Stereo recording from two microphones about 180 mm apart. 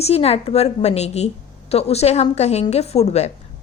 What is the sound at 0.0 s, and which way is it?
A woman's voice, 35° left (ahead or behind).